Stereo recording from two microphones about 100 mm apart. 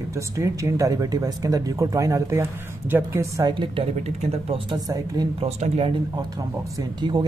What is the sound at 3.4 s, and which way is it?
Speech, 60° right (ahead or behind).